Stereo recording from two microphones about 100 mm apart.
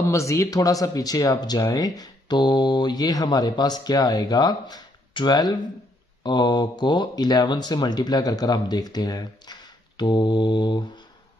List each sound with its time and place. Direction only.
0.0 s speech: 30° left (ahead or behind); by 10.9 s 50° left (ahead or behind)